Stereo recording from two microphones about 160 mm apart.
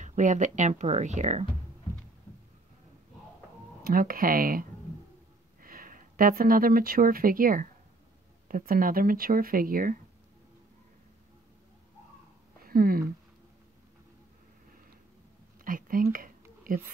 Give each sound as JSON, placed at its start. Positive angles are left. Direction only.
{"t": 0.0, "sound": "speech", "side_deg": -50}
{"t": 3.8, "sound": "speech", "side_deg": -65}
{"t": 12.6, "sound": "speech", "side_deg": -65}
{"t": 15.6, "sound": "speech", "side_deg": -60}